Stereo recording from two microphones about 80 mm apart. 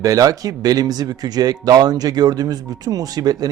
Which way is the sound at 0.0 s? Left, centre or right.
Right.